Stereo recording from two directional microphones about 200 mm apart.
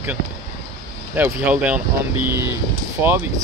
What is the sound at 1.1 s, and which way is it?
Speech, 10° right (ahead or behind).